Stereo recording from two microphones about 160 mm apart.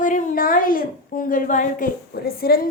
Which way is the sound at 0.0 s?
55° left (ahead or behind).